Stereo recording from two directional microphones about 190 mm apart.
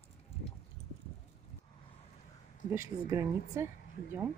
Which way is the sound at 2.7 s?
15° right (ahead or behind).